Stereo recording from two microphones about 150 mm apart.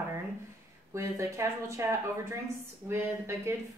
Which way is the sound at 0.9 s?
20° right (ahead or behind).